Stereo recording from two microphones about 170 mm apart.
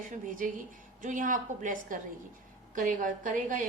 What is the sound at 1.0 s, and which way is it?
Speech, 50° right (ahead or behind).